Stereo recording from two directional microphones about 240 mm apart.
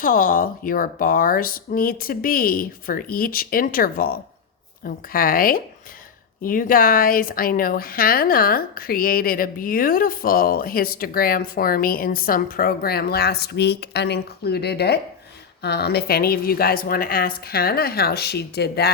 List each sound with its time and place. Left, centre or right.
0.0 s a woman's voice: left